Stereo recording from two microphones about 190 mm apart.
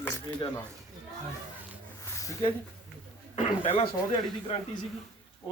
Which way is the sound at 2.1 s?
15° left (ahead or behind).